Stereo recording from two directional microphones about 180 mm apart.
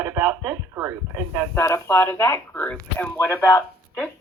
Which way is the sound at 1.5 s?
15° left (ahead or behind).